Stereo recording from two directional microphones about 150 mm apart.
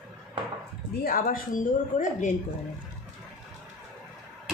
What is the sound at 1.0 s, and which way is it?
A woman's voice, 70° left (ahead or behind).